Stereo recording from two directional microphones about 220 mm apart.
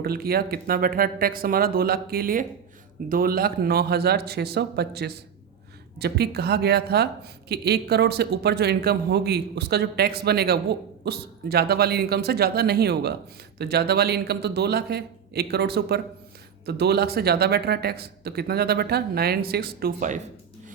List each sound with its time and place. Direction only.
0.0 s speech: 45° right (ahead or behind)